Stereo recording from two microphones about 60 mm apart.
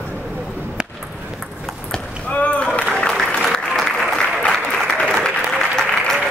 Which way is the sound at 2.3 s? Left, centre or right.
Left.